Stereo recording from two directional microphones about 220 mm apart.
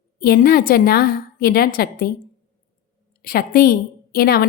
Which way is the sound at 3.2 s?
45° left (ahead or behind).